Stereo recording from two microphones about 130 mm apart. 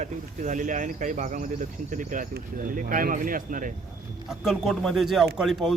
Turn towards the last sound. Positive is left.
turn(degrees=0)  # may be behind; listen again after turning